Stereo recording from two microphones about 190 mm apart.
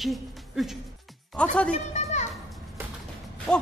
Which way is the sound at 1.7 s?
40° left (ahead or behind).